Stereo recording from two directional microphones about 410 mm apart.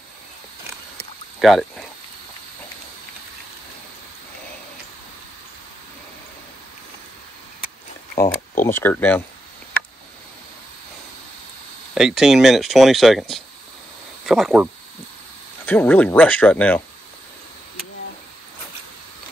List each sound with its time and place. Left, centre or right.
1.4 s speech: centre
8.2 s a sound: centre
11.9 s speech: centre